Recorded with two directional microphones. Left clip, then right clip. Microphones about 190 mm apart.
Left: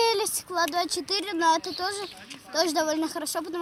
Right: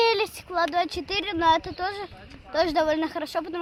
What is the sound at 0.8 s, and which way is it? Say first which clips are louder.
Speech: right 1 dB; 30° right (ahead or behind).